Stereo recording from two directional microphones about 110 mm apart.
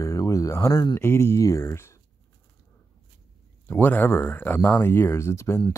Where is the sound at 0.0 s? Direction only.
30° left (ahead or behind).